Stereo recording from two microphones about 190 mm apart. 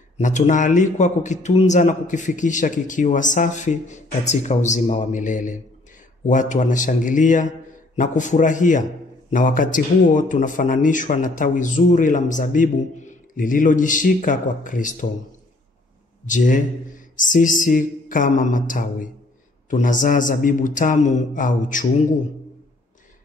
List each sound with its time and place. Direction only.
0.2 s a man's voice: 40° left (ahead or behind)
16.3 s a man's voice: 40° left (ahead or behind)